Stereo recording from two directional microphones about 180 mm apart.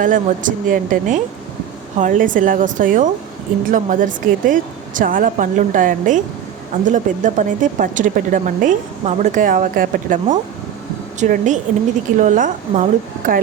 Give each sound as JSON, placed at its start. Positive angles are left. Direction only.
{"t": 0.0, "sound": "speech", "side_deg": -50}